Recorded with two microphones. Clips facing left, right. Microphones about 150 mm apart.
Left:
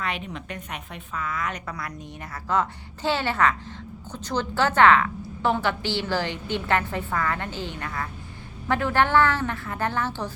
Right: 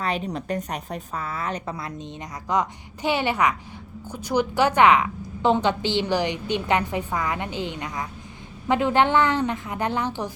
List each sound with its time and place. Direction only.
0.0 s a woman's voice: 35° right (ahead or behind); by 10.3 s 15° right (ahead or behind)